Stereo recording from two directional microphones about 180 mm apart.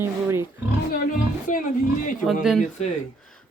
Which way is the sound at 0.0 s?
15° right (ahead or behind).